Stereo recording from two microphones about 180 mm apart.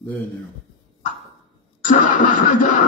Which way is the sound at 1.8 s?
45° left (ahead or behind).